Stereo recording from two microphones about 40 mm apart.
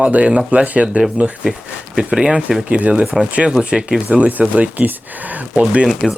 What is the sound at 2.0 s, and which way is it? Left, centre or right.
Speech, centre.